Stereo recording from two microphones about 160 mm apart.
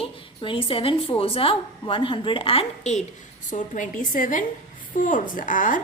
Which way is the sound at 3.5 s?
55° left (ahead or behind).